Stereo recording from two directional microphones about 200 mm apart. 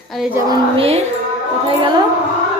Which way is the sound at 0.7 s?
30° right (ahead or behind).